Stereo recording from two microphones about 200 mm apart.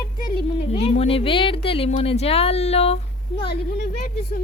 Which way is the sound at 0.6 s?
30° left (ahead or behind).